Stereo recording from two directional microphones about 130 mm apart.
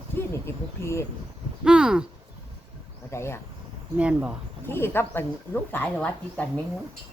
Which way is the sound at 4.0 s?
10° right (ahead or behind).